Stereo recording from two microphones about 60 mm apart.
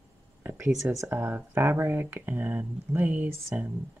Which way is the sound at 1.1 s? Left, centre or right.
Right.